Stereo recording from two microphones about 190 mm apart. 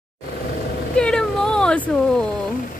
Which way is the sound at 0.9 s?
5° left (ahead or behind).